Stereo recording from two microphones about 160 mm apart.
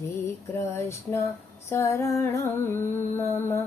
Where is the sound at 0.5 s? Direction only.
15° left (ahead or behind).